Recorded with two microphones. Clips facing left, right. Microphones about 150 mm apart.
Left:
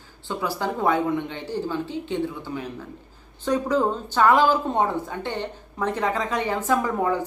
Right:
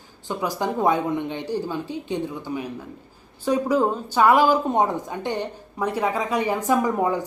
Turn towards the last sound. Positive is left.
turn(degrees=-15)  # may be behind; listen again after turning